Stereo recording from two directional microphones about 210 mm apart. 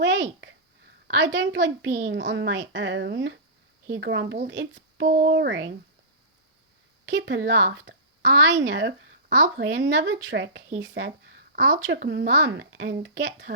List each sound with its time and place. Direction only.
0.0 s a sound: 60° right (ahead or behind)
1.0 s a woman's voice: 60° right (ahead or behind)
7.1 s a woman's voice: 60° right (ahead or behind)